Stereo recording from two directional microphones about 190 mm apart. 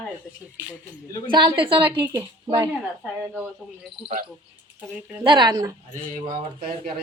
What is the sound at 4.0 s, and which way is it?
Speech, 5° right (ahead or behind).